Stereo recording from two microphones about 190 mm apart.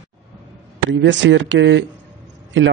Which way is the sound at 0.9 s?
70° right (ahead or behind).